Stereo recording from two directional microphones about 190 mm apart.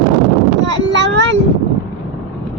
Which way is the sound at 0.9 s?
70° right (ahead or behind).